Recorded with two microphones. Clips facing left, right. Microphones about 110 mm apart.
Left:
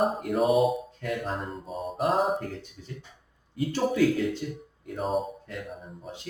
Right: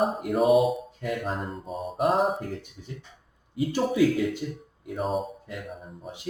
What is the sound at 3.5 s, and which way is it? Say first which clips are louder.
Mantra: right 1 dB; 10° right (ahead or behind).